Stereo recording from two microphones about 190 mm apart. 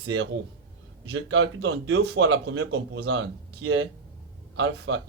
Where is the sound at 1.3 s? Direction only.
80° right.